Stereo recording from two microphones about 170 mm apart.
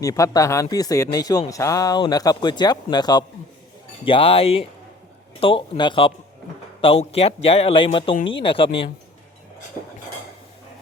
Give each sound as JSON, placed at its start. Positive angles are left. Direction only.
{"t": 0.0, "sound": "a man's voice", "side_deg": 20}